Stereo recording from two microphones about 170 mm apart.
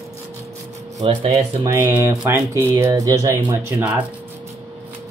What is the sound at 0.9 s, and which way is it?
Speech, 25° right (ahead or behind).